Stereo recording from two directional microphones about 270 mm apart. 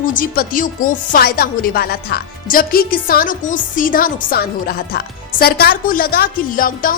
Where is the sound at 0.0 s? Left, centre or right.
Left.